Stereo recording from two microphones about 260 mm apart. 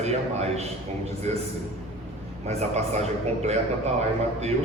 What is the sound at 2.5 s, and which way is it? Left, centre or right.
A man's voice, right.